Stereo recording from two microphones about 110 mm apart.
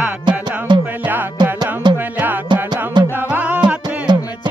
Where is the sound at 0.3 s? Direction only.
45° right (ahead or behind).